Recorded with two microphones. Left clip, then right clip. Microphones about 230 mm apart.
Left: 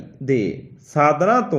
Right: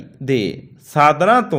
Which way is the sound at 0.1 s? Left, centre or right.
Right.